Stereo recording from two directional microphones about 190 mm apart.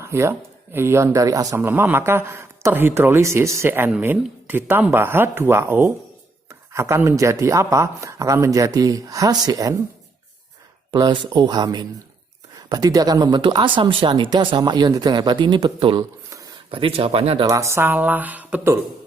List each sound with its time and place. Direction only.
0.0 s speech: 15° right (ahead or behind)
10.9 s speech: 25° right (ahead or behind)
17.4 s speech: 15° right (ahead or behind)